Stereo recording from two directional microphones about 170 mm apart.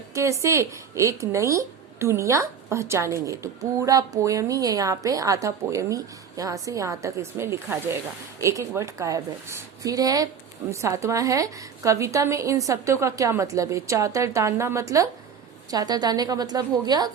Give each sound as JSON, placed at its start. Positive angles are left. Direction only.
{"t": 0.1, "sound": "a woman's voice", "side_deg": -15}